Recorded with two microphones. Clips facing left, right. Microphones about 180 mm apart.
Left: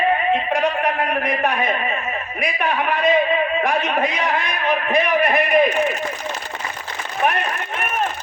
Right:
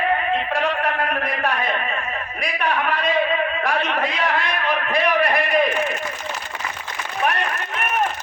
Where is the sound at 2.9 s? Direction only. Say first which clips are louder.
Left 6 dB; 20° left (ahead or behind).